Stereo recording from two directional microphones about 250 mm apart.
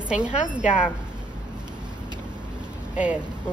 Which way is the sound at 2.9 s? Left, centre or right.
Centre.